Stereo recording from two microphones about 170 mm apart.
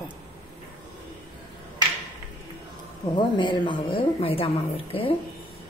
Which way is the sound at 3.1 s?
25° left (ahead or behind).